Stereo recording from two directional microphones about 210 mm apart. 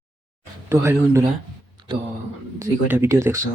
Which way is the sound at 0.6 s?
10° right (ahead or behind).